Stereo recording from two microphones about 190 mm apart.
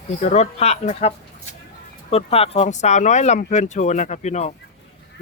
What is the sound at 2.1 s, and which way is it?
Speech, 30° left (ahead or behind).